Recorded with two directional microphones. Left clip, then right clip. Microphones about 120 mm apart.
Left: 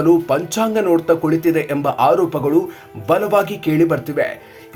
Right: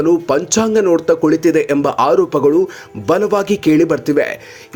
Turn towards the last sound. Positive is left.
turn(degrees=-45)  # may be behind; listen again after turning